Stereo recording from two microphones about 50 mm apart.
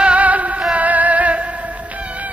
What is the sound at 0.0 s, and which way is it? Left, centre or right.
Music, right.